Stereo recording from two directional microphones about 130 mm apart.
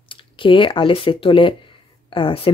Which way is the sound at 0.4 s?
40° left (ahead or behind).